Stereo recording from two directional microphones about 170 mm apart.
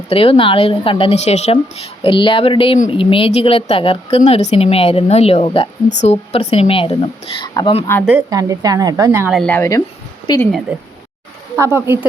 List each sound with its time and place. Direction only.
0.1 s speech: 35° left (ahead or behind)
8.3 s speech: 20° right (ahead or behind)
9.3 s speech: 5° left (ahead or behind)
9.6 s speech: 20° left (ahead or behind)
11.5 s speech: 15° right (ahead or behind)